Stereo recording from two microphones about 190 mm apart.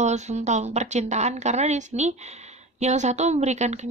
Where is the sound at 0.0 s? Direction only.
35° right (ahead or behind).